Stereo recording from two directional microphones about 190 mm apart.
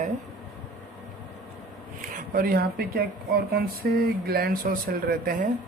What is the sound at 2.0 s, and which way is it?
Speech, 45° right (ahead or behind).